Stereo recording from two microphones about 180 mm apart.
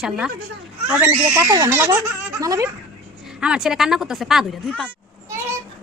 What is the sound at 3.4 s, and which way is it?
A woman's voice, 5° right (ahead or behind).